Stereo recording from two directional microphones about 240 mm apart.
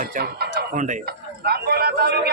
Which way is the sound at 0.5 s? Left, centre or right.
Right.